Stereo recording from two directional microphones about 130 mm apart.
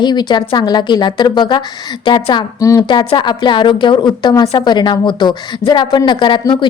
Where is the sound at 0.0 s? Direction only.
35° left (ahead or behind).